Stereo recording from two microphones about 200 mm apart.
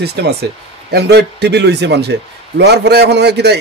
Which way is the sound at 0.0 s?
55° right (ahead or behind).